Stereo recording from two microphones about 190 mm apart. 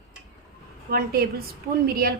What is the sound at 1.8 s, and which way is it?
Speech, 50° right (ahead or behind).